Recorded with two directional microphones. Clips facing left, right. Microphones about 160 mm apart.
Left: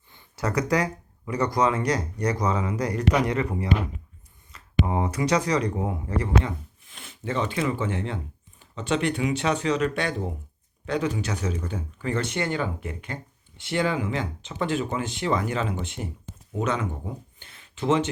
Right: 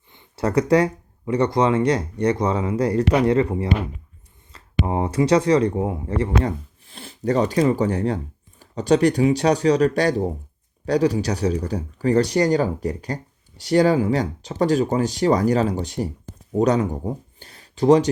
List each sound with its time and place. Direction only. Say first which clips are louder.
0.1 s speech: right 6 dB; 25° right (ahead or behind)